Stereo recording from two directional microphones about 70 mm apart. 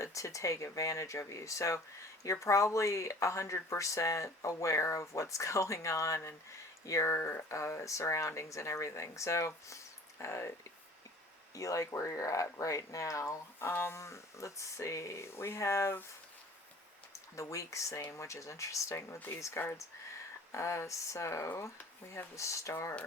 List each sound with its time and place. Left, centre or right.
0.0 s speech: left
9.6 s a sound: left
11.5 s speech: left
13.6 s speech: left
17.1 s speech: left
20.5 s speech: left